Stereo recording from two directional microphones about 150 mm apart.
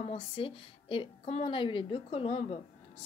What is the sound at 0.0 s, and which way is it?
A woman's voice, 40° left (ahead or behind).